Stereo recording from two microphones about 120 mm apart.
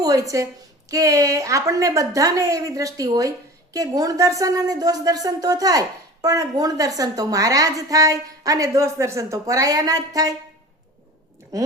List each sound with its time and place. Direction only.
0.0 s a woman's voice: 30° right (ahead or behind)